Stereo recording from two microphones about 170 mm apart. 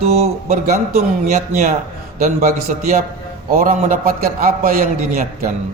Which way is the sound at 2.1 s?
55° right (ahead or behind).